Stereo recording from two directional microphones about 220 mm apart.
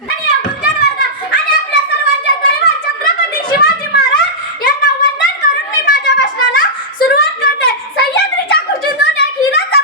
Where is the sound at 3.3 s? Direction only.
45° left (ahead or behind).